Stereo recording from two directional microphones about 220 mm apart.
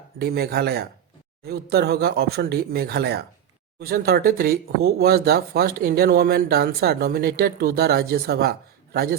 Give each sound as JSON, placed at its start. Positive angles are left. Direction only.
{"t": 0.2, "sound": "speech", "side_deg": -45}